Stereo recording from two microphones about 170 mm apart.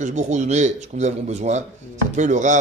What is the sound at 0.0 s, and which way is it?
A man's voice, 45° right (ahead or behind).